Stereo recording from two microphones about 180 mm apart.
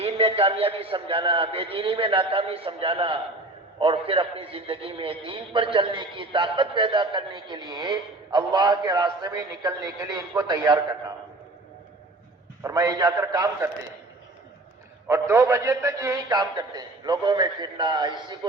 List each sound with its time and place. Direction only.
0.0 s a man's voice: 35° right (ahead or behind)
12.6 s a man's voice: 20° right (ahead or behind)
15.0 s a man's voice: 15° right (ahead or behind)